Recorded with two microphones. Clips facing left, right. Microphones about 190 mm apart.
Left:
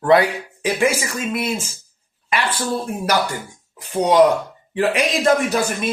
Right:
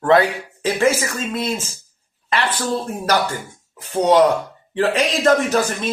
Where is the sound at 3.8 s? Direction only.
15° left (ahead or behind).